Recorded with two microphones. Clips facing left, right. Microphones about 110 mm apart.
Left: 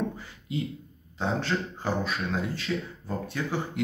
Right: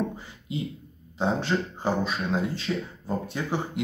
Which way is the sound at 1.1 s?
20° right (ahead or behind).